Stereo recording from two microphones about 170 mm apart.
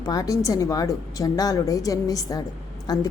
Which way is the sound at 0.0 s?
20° left (ahead or behind).